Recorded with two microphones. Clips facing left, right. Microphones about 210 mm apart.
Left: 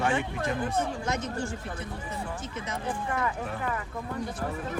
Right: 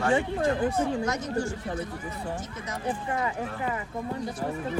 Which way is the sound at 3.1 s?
20° right (ahead or behind).